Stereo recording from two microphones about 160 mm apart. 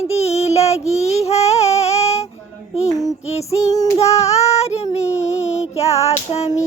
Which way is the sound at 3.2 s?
40° left (ahead or behind).